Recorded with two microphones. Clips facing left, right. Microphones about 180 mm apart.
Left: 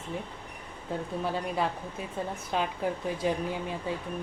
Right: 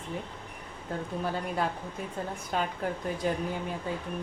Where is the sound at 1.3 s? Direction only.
Centre (ahead or behind).